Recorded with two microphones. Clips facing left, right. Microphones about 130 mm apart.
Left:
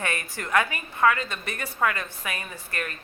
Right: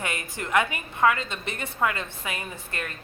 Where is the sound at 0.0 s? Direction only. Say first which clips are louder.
Left 1 dB; 20° right (ahead or behind).